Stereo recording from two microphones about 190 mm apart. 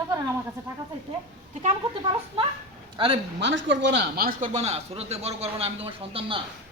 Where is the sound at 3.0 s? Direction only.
25° right (ahead or behind).